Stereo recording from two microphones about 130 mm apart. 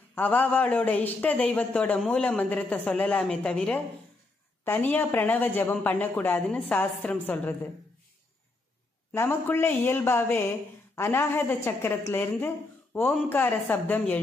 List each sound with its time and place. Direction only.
0.1 s a man's voice: 15° left (ahead or behind)
9.1 s a man's voice: 20° left (ahead or behind)